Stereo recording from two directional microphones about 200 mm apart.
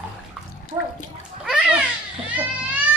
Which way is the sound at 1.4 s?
5° right (ahead or behind).